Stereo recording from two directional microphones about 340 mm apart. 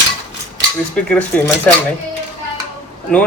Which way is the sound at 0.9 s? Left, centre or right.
Centre.